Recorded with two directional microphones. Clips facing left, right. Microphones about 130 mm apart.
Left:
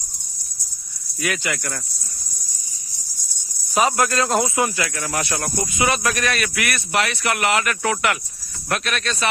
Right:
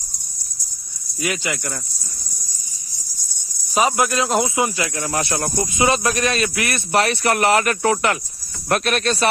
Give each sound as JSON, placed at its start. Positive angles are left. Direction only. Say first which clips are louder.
{"t": 1.2, "sound": "speech", "louder": "right 1 dB", "side_deg": -20}
{"t": 3.8, "sound": "speech", "louder": "right 1 dB", "side_deg": -20}
{"t": 8.7, "sound": "speech", "louder": "right 5 dB", "side_deg": -45}